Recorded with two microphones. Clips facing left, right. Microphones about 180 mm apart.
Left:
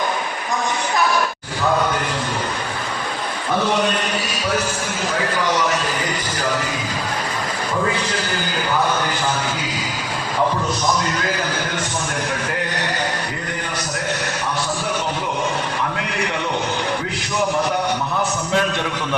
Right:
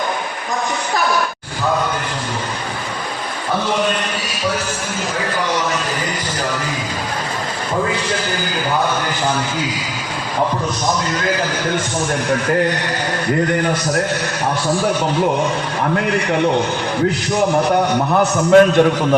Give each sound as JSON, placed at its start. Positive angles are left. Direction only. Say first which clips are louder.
{"t": 18.1, "sound": "a man's voice", "louder": "right 10 dB", "side_deg": -55}